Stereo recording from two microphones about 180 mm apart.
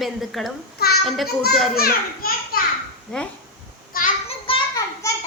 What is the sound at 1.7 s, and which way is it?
Speech, 55° left (ahead or behind).